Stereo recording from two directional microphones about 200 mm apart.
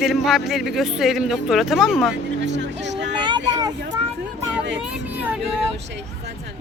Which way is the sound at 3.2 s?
20° right (ahead or behind).